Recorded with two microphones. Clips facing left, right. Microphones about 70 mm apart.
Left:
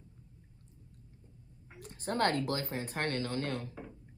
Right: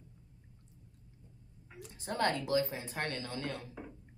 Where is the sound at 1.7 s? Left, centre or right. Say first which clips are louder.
Left 4 dB; left.